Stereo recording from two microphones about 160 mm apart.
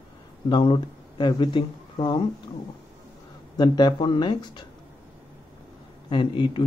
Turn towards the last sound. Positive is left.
turn(degrees=30)  # may be behind; listen again after turning